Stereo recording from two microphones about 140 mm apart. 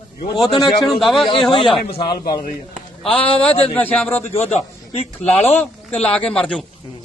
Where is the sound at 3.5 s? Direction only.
45° left (ahead or behind).